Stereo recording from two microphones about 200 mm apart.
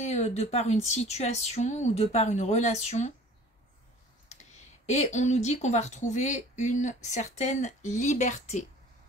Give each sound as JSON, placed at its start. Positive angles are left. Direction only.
{"t": 0.0, "sound": "speech", "side_deg": 35}
{"t": 4.3, "sound": "speech", "side_deg": 35}